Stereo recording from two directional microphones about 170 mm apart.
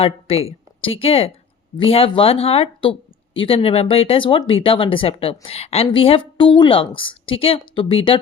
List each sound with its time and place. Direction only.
0.0 s a woman's voice: 35° left (ahead or behind)